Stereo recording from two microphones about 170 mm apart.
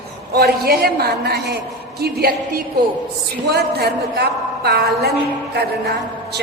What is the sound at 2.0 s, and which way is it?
A woman's voice, 65° right (ahead or behind).